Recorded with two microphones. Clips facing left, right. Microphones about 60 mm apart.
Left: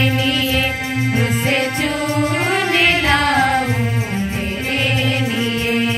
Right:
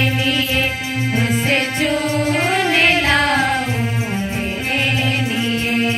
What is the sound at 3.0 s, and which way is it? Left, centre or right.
Music, right.